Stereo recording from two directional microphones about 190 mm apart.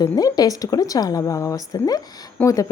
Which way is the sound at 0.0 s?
20° left (ahead or behind).